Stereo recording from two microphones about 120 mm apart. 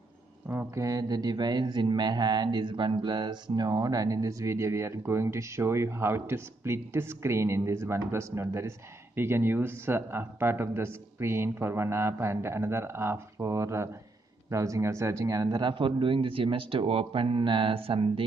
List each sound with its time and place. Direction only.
0.7 s a man's voice: 30° right (ahead or behind); by 18.2 s 50° right (ahead or behind)